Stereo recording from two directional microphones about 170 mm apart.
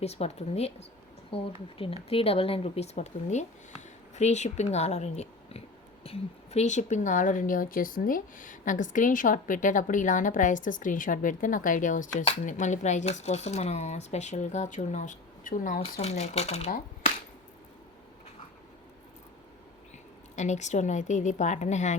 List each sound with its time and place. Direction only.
0.0 s speech: 40° left (ahead or behind)
15.8 s speech: 40° left (ahead or behind)
20.3 s speech: 45° left (ahead or behind)